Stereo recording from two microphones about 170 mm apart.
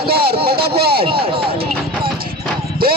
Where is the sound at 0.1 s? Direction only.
65° right (ahead or behind).